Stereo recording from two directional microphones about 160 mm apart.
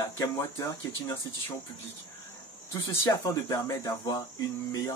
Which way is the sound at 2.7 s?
20° left (ahead or behind).